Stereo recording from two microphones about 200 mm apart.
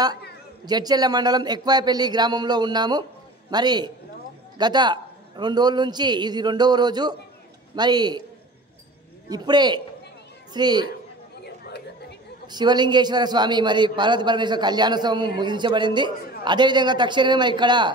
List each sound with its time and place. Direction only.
0.7 s a man's voice: 20° right (ahead or behind)
9.3 s a man's voice: 20° right (ahead or behind)
12.4 s a man's voice: 20° right (ahead or behind)